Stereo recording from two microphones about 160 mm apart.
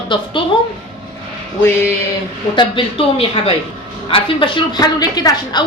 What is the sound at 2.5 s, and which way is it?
A woman's voice, 30° left (ahead or behind).